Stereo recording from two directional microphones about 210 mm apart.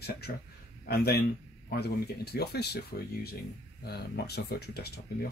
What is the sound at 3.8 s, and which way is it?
Speech, 50° left (ahead or behind).